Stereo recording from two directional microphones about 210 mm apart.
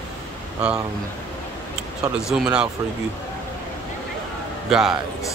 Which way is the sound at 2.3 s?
5° right (ahead or behind).